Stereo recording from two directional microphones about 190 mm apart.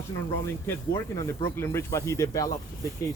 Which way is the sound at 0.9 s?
20° left (ahead or behind).